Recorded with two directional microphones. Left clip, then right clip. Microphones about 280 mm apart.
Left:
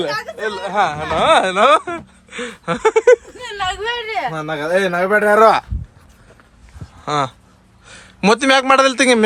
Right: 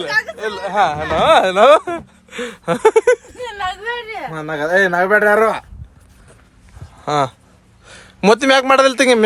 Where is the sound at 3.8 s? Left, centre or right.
Left.